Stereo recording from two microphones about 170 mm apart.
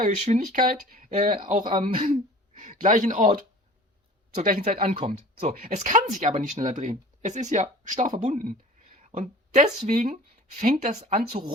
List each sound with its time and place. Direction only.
0.0 s speech: 45° right (ahead or behind)
4.4 s speech: 55° right (ahead or behind)